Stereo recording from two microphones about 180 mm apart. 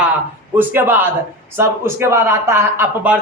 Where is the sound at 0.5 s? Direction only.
10° right (ahead or behind).